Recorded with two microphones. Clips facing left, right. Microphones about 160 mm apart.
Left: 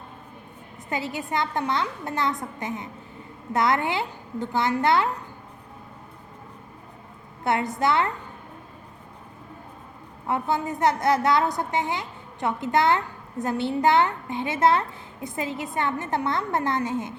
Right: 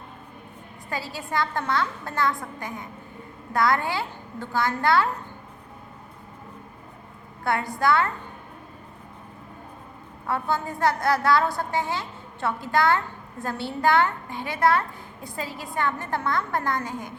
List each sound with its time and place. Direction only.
0.9 s a woman's voice: 20° left (ahead or behind)
7.4 s a woman's voice: 20° left (ahead or behind)
10.2 s a woman's voice: 20° left (ahead or behind)